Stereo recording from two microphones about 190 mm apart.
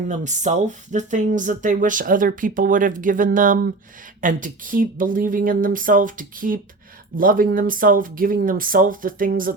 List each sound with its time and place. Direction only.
0.1 s speech: 40° right (ahead or behind)